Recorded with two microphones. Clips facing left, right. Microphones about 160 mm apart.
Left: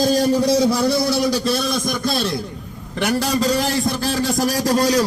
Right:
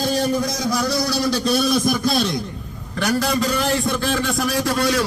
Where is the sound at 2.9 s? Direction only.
25° left (ahead or behind).